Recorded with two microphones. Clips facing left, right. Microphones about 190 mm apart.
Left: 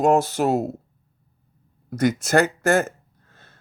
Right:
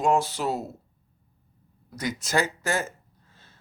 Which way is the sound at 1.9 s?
55° left (ahead or behind).